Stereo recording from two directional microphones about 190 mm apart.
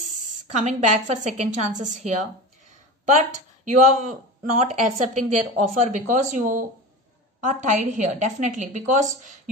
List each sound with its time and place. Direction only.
0.1 s a woman's voice: 40° right (ahead or behind)
3.2 s speech: 40° right (ahead or behind)